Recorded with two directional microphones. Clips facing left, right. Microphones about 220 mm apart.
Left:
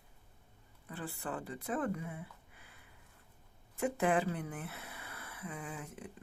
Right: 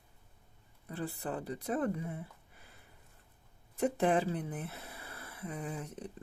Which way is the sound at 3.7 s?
35° right (ahead or behind).